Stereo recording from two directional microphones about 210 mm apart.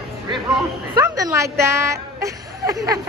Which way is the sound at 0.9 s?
15° right (ahead or behind).